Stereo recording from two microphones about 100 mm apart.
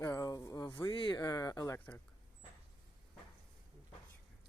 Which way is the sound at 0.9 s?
50° left (ahead or behind).